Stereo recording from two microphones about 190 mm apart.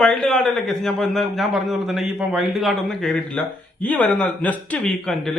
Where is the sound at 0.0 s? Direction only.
5° left (ahead or behind).